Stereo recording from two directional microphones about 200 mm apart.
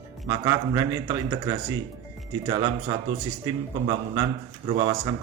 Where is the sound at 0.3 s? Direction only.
20° right (ahead or behind).